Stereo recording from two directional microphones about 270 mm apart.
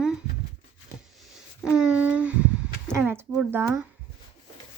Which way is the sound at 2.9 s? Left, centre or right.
Centre.